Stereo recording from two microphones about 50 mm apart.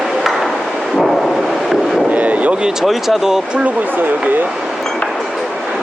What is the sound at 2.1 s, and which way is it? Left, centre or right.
Speech, right.